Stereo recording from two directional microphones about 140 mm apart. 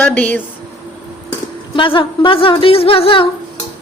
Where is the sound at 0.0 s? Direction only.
10° left (ahead or behind).